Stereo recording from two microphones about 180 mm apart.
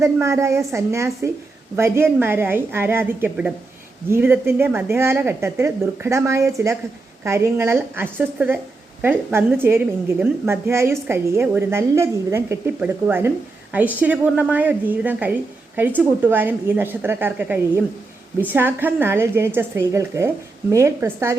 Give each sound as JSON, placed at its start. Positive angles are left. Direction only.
{"t": 0.0, "sound": "a woman's voice", "side_deg": -15}